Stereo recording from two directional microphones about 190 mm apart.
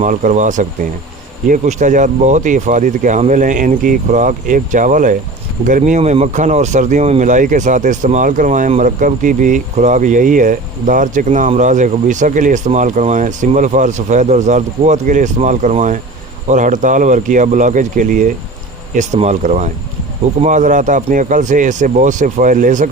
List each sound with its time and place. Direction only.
0.0 s speech: 40° right (ahead or behind)